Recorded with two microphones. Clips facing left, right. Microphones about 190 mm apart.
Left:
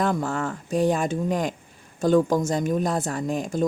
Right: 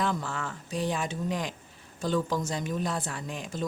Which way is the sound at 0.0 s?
50° left (ahead or behind).